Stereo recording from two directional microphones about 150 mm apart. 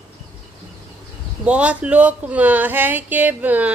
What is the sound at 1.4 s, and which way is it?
Speech, 10° right (ahead or behind).